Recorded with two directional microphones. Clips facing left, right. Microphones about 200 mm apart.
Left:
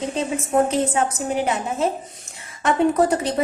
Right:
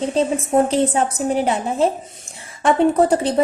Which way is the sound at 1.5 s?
30° right (ahead or behind).